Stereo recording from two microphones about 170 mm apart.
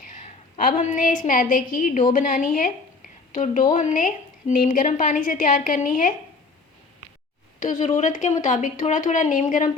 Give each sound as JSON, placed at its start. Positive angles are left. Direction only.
{"t": 0.1, "sound": "a woman's voice", "side_deg": 50}
{"t": 7.6, "sound": "a woman's voice", "side_deg": 45}